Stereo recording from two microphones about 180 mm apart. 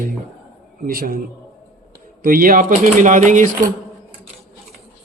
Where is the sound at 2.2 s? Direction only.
50° right (ahead or behind).